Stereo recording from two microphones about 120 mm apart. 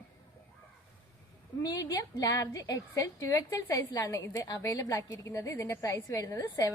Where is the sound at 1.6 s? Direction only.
30° left (ahead or behind).